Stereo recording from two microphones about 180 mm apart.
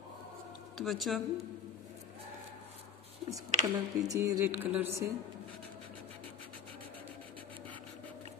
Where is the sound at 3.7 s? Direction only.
20° right (ahead or behind).